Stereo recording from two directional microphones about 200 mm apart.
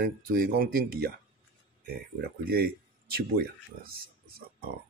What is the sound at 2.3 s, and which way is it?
Speech, 50° right (ahead or behind).